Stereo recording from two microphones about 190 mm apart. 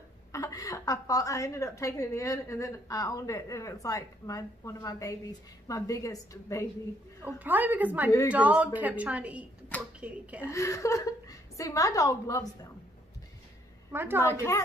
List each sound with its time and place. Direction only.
0.3 s a woman's voice: 20° left (ahead or behind)
7.3 s a woman's voice: 10° right (ahead or behind)
10.5 s a woman's voice: 15° left (ahead or behind)
13.9 s a woman's voice: 10° right (ahead or behind)
14.2 s a woman's voice: 15° left (ahead or behind)